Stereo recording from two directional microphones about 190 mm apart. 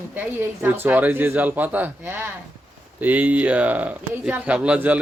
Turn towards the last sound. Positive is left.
turn(degrees=-5)  # may be behind; listen again after turning